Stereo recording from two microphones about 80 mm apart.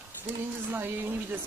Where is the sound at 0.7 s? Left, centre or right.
Right.